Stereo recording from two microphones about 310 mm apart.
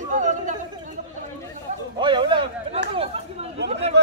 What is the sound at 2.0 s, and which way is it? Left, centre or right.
Speech, centre.